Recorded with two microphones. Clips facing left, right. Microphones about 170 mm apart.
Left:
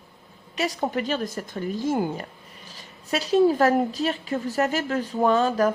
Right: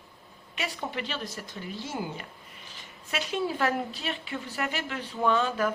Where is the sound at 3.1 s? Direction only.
35° left (ahead or behind).